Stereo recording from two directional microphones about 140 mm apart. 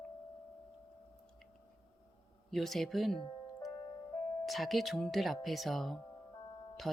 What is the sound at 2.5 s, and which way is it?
Speech, centre (ahead or behind).